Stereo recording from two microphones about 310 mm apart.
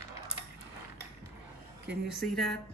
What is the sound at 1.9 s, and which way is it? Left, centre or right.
Speech, centre.